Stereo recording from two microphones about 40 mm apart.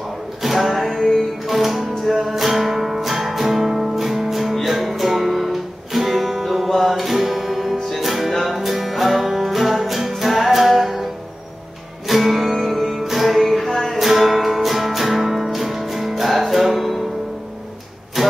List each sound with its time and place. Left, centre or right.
0.4 s music: centre
12.1 s music: centre
13.9 s music: centre